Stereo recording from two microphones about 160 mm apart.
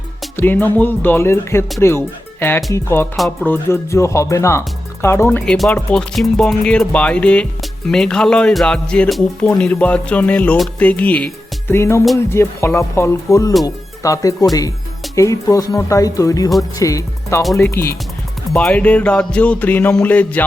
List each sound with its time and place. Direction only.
0.3 s speech: 10° left (ahead or behind)
5.5 s speech: 5° left (ahead or behind); by 17.4 s 20° left (ahead or behind)
17.4 s speech: centre (ahead or behind)